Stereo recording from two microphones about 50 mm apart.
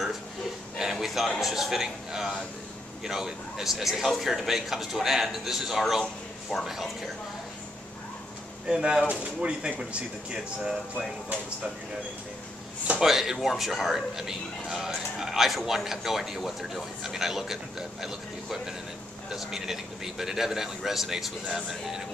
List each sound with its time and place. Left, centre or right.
0.7 s a sound: centre
1.4 s a man's voice: centre
8.6 s speech: centre
13.0 s speech: centre